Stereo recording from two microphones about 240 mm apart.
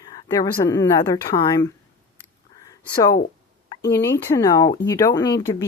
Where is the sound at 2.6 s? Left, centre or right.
Centre.